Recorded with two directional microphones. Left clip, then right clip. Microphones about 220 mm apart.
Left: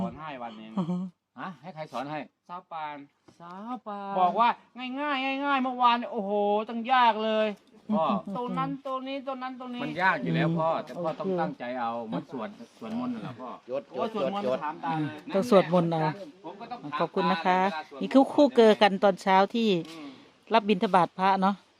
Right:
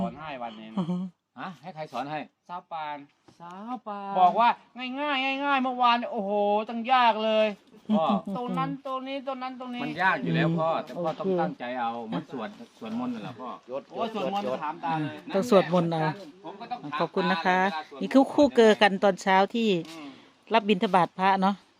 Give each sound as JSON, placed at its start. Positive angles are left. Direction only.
{"t": 0.0, "sound": "a man's voice", "side_deg": -5}
{"t": 2.5, "sound": "a man's voice", "side_deg": -5}
{"t": 3.4, "sound": "speech", "side_deg": 15}
{"t": 4.2, "sound": "a man's voice", "side_deg": 0}
{"t": 7.9, "sound": "speech", "side_deg": 10}
{"t": 8.3, "sound": "a man's voice", "side_deg": -5}
{"t": 9.8, "sound": "a man's voice", "side_deg": 15}
{"t": 13.7, "sound": "speech", "side_deg": 50}
{"t": 14.6, "sound": "a man's voice", "side_deg": 0}